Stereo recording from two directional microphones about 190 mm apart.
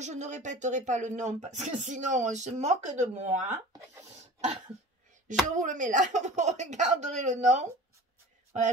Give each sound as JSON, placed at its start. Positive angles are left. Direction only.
{"t": 0.0, "sound": "speech", "side_deg": -40}
{"t": 5.5, "sound": "speech", "side_deg": -40}